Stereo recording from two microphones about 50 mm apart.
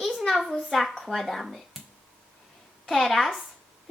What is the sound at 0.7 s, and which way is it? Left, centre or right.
Speech, centre.